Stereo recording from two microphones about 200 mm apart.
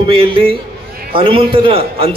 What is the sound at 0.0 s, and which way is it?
A man's voice, 25° right (ahead or behind).